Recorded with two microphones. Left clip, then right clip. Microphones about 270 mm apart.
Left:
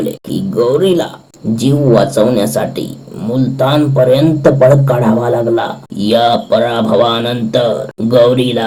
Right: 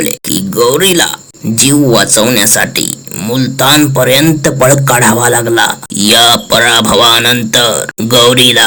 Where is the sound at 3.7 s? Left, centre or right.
Right.